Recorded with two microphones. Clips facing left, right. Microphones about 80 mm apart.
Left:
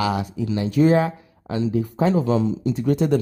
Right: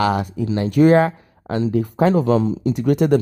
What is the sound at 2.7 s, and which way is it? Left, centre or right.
Speech, right.